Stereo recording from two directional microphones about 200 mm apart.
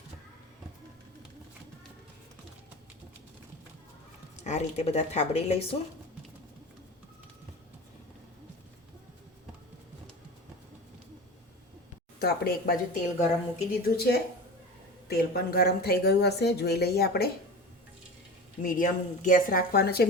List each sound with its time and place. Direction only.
4.4 s a woman's voice: 35° left (ahead or behind)
12.2 s a woman's voice: 50° left (ahead or behind)
18.6 s a woman's voice: 40° left (ahead or behind)